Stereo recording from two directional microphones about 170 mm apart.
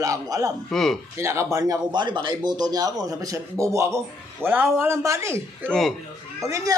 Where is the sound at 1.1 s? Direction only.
15° right (ahead or behind).